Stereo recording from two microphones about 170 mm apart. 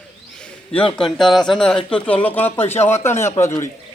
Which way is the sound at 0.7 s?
5° left (ahead or behind).